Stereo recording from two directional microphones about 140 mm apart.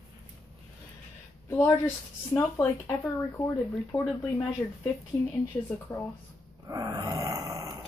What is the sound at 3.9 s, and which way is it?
Speech, 10° left (ahead or behind).